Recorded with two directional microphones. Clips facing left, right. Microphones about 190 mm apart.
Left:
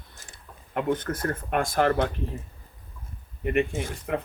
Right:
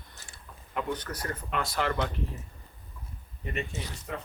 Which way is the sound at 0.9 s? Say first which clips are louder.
Left 7 dB; 50° left (ahead or behind).